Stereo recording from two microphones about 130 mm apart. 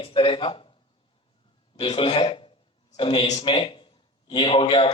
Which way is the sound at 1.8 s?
40° left (ahead or behind).